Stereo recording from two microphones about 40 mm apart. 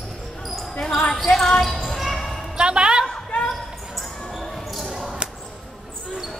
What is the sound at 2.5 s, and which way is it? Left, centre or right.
Music, right.